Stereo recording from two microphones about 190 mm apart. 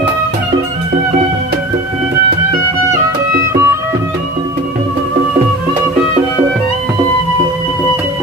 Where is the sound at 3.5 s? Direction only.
15° right (ahead or behind).